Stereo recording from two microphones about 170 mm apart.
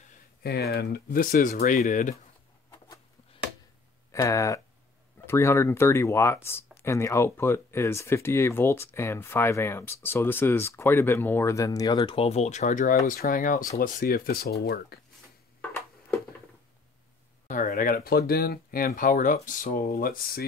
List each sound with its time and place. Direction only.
0.4 s speech: 65° left (ahead or behind); by 2.1 s 45° left (ahead or behind)
4.1 s speech: 20° left (ahead or behind); by 15.0 s 65° left (ahead or behind)
17.5 s speech: 50° left (ahead or behind)